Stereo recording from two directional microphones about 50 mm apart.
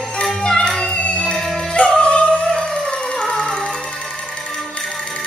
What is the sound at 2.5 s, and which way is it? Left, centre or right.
Emergency vehicle, centre.